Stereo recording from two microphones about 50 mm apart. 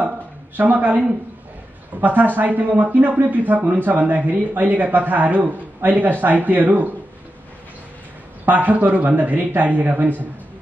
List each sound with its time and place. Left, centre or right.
0.6 s a man's voice: right
8.5 s a man's voice: right